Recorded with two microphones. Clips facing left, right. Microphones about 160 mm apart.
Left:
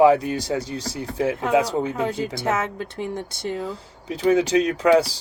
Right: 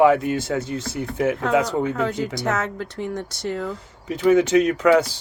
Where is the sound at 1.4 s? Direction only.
25° left (ahead or behind).